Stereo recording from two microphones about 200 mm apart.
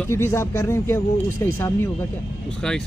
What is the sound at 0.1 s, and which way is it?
Speech, 15° left (ahead or behind).